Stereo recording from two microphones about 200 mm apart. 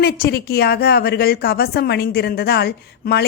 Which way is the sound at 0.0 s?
55° left (ahead or behind).